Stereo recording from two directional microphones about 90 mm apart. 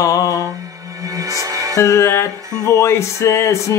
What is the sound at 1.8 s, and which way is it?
Music, 30° left (ahead or behind).